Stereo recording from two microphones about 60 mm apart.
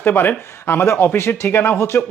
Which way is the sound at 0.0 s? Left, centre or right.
Left.